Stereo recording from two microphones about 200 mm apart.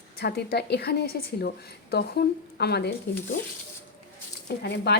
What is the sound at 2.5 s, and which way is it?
Speech, 55° left (ahead or behind).